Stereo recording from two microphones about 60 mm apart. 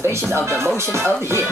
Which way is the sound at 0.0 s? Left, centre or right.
Right.